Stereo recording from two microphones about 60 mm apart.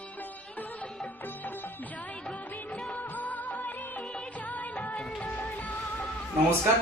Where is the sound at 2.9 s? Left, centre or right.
Left.